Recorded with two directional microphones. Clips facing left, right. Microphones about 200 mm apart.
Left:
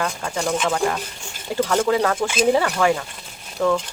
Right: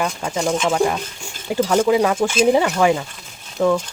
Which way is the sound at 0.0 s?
20° right (ahead or behind).